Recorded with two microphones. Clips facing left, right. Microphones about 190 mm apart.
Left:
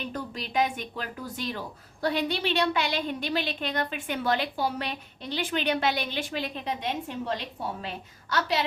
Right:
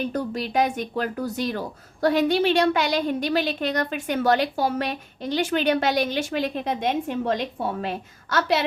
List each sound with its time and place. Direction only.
0.0 s speech: 40° right (ahead or behind)